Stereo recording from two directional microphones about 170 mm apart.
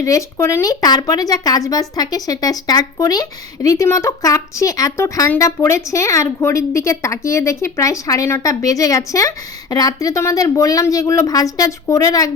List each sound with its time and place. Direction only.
0.0 s a woman's voice: 20° left (ahead or behind)